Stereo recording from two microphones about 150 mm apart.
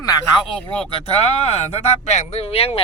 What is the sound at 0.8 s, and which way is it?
Speech, 40° left (ahead or behind).